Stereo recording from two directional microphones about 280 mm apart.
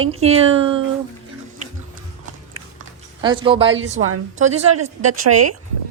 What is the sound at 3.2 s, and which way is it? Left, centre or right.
Speech, centre.